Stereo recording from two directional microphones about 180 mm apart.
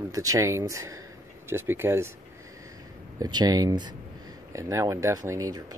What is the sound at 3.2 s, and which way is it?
Speech, 20° right (ahead or behind).